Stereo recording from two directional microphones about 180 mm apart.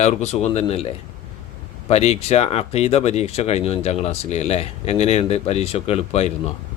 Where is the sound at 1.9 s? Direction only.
35° left (ahead or behind).